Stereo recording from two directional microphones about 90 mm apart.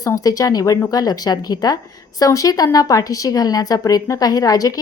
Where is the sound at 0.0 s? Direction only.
40° left (ahead or behind).